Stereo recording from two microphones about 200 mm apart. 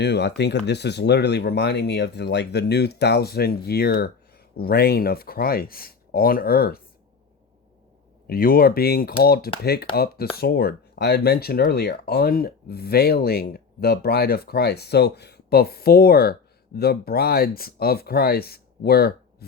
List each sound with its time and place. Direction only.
0.0 s speech: 55° left (ahead or behind)
8.3 s speech: 45° left (ahead or behind)